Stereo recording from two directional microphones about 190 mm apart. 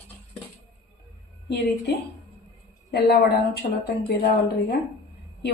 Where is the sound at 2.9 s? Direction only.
60° left (ahead or behind).